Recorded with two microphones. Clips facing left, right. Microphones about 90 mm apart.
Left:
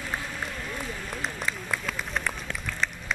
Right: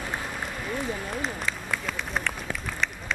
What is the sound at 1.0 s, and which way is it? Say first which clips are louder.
Run: right 2 dB; centre (ahead or behind).